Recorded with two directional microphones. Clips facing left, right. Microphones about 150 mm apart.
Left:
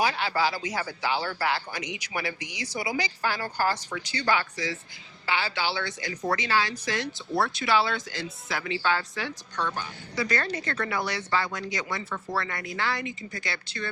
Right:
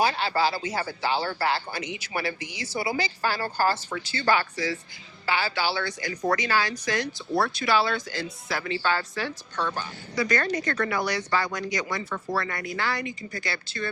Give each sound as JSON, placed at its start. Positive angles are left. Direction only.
{"t": 0.0, "sound": "speech", "side_deg": 15}
{"t": 1.2, "sound": "speech", "side_deg": -40}
{"t": 1.5, "sound": "speech", "side_deg": 15}
{"t": 10.2, "sound": "speech", "side_deg": 30}